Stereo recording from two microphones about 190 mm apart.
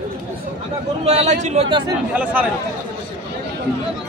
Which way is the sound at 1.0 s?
35° right (ahead or behind).